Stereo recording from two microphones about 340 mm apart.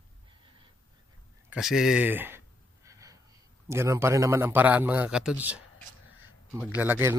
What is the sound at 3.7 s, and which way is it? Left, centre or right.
A man's voice, centre.